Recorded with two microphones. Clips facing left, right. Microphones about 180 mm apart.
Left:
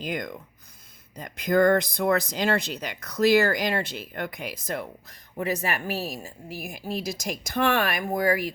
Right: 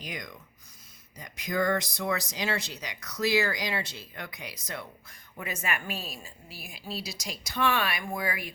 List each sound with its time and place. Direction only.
0.0 s speech: 55° left (ahead or behind)
5.4 s a woman's voice: 35° left (ahead or behind)